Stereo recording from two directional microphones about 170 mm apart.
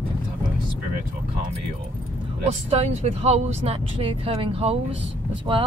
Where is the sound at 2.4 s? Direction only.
40° right (ahead or behind).